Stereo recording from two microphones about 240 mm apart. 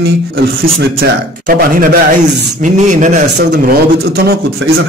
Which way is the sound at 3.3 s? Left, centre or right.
Right.